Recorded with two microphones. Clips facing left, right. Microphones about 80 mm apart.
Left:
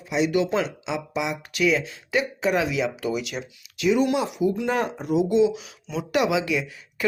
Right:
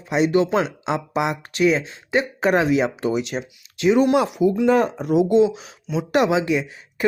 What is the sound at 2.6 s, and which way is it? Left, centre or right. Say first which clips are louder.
Speech: right 6 dB; right.